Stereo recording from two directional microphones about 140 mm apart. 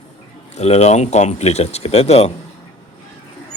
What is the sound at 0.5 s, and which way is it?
Speech, 50° left (ahead or behind).